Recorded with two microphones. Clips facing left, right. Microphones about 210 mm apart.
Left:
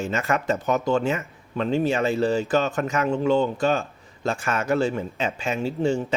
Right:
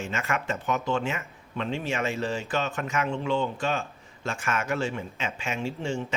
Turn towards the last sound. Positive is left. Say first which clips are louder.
# left 7 dB
turn(degrees=35)  # may be behind; listen again after turning